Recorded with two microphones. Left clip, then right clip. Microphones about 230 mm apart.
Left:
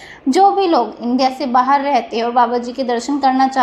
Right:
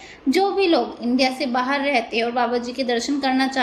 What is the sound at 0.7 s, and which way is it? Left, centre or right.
A woman's voice, centre.